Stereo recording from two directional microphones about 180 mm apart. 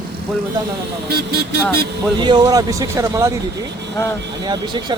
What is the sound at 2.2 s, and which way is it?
Speech, 25° right (ahead or behind).